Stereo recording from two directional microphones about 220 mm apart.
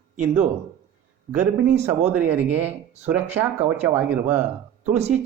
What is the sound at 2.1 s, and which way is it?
Speech, 5° right (ahead or behind).